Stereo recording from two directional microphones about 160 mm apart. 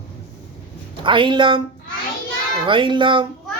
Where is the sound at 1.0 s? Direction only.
30° right (ahead or behind).